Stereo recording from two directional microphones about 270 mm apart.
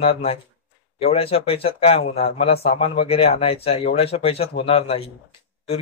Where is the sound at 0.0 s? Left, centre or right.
Left.